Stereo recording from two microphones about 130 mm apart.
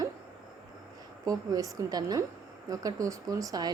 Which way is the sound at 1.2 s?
25° right (ahead or behind).